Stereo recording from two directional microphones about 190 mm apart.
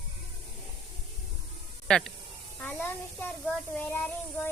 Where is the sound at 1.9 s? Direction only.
Centre (ahead or behind).